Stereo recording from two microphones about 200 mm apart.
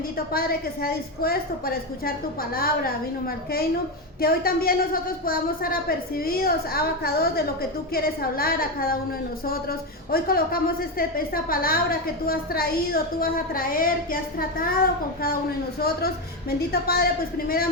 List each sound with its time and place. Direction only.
0.3 s a woman's voice: 50° left (ahead or behind)
15.8 s a woman's voice: 50° left (ahead or behind)